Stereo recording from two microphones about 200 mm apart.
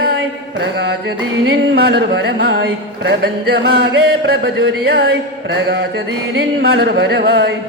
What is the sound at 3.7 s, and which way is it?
Chant, 50° right (ahead or behind).